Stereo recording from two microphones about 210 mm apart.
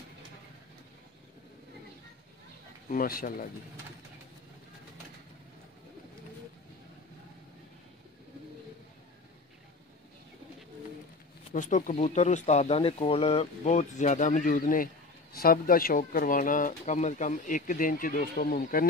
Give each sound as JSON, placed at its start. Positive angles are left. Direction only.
{"t": 2.9, "sound": "speech", "side_deg": 40}
{"t": 11.5, "sound": "speech", "side_deg": 35}